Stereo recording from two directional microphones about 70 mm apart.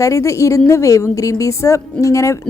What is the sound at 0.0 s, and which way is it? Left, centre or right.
A woman's voice, left.